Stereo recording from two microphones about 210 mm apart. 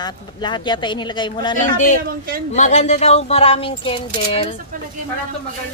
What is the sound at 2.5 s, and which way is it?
Speech, 35° left (ahead or behind).